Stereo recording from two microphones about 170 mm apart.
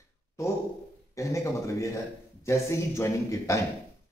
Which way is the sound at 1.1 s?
20° left (ahead or behind).